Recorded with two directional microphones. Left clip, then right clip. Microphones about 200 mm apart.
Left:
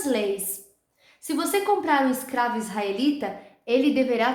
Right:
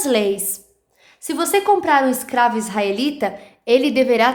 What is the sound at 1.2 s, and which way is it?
A woman's voice, 45° right (ahead or behind).